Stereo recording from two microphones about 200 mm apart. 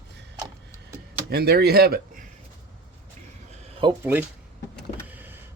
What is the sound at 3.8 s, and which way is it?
Speech, 25° right (ahead or behind).